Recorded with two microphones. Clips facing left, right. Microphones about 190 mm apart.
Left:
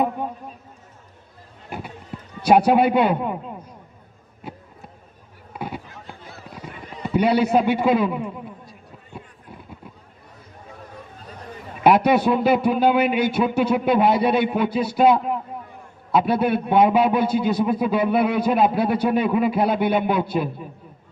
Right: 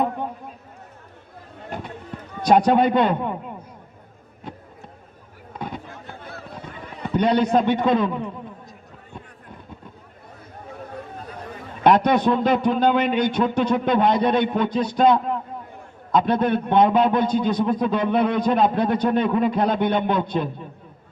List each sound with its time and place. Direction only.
2.4 s a man's voice: 10° left (ahead or behind)
4.4 s a sound: 5° left (ahead or behind)
5.5 s fireworks: 10° left (ahead or behind)
6.1 s a sound: 60° right (ahead or behind)
7.1 s a man's voice: 10° left (ahead or behind)
11.8 s a man's voice: 10° left (ahead or behind)